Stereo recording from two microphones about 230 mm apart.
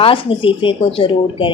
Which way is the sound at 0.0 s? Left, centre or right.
Left.